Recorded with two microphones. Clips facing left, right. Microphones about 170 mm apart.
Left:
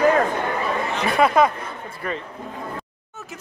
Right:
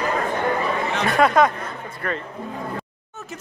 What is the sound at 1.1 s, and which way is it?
Speech, 5° left (ahead or behind).